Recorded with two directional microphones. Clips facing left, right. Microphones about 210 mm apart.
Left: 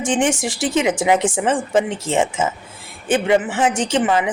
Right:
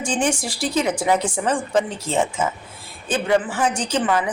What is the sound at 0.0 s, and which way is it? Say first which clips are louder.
A woman's voice: left 4 dB; 20° left (ahead or behind).